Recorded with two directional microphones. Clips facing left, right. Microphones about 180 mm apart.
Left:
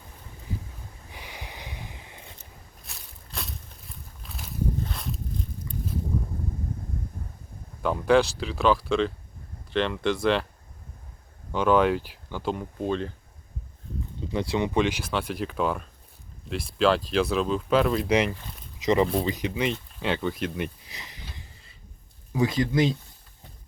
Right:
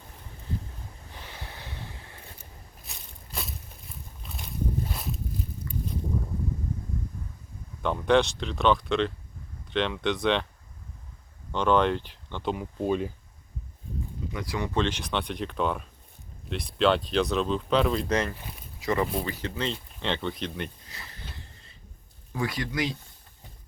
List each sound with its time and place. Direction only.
1.1 s snort: 15° left (ahead or behind)
2.8 s a sound: centre (ahead or behind)
7.8 s speech: 5° left (ahead or behind)
11.5 s speech: 5° left (ahead or behind)
12.8 s speech: 10° right (ahead or behind)
14.2 s speech: 30° left (ahead or behind); by 18.1 s centre (ahead or behind)
18.1 s speech: 10° left (ahead or behind)
20.9 s sniff: 15° left (ahead or behind)
22.3 s speech: 20° left (ahead or behind)